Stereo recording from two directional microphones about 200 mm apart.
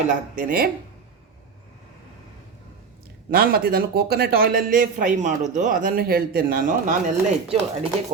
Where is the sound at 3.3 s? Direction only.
50° right (ahead or behind).